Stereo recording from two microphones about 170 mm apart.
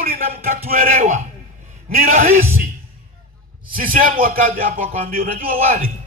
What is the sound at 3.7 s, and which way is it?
Speech, 55° right (ahead or behind).